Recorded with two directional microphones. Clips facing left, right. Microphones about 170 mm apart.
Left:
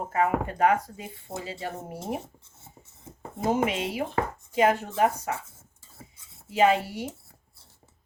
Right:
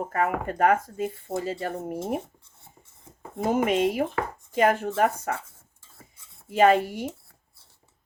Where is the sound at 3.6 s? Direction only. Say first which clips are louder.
Right 5 dB; 50° right (ahead or behind).